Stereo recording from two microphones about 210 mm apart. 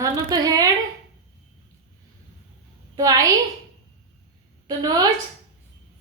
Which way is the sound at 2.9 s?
15° right (ahead or behind).